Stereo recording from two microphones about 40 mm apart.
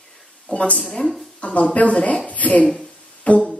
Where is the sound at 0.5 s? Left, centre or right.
Left.